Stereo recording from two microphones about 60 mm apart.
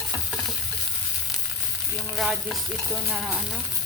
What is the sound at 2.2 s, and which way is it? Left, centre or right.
Stir, centre.